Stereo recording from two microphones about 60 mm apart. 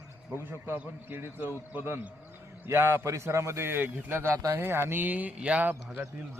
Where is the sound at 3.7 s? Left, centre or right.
Right.